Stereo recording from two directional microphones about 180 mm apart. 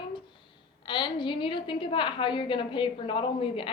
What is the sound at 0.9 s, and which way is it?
A woman's voice, 25° left (ahead or behind).